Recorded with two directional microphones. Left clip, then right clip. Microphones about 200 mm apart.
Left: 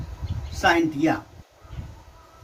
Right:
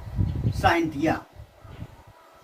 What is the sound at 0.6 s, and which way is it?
Speech, 15° right (ahead or behind).